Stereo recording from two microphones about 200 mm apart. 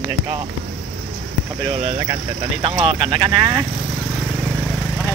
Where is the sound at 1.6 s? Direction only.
30° right (ahead or behind).